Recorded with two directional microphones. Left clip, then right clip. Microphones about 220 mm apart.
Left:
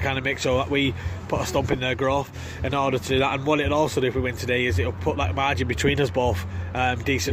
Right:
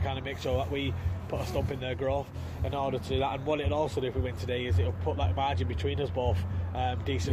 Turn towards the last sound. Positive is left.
turn(degrees=45)  # may be behind; listen again after turning